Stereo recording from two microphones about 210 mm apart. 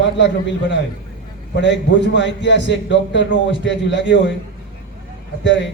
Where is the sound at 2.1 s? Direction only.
60° left (ahead or behind).